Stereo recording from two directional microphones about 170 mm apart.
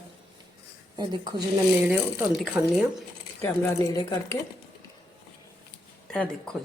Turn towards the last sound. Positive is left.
turn(degrees=5)  # may be behind; listen again after turning